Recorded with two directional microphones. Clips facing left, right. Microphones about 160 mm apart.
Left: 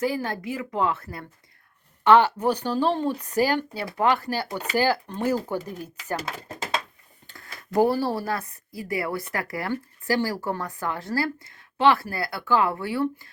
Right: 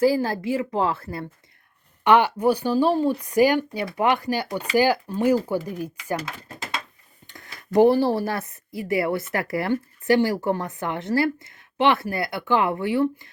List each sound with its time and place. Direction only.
0.0 s a woman's voice: 30° right (ahead or behind)
2.0 s speech: 15° right (ahead or behind)
7.3 s speech: 20° right (ahead or behind)